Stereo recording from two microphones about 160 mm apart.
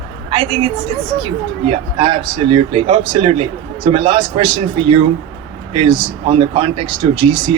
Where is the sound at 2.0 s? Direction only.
35° right (ahead or behind).